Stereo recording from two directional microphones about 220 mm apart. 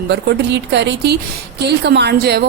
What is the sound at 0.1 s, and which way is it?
A woman's voice, 50° right (ahead or behind).